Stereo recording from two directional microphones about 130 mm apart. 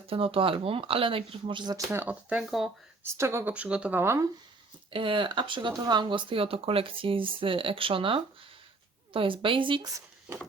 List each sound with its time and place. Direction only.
0.0 s speech: 45° right (ahead or behind)
1.9 s speech: 15° right (ahead or behind)
2.3 s speech: centre (ahead or behind)
3.0 s speech: 20° right (ahead or behind)
4.9 s speech: 40° right (ahead or behind)